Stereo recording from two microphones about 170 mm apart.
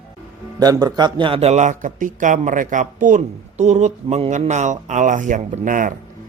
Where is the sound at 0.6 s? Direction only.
20° right (ahead or behind).